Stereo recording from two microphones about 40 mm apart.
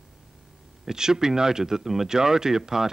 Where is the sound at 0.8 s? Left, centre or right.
Centre.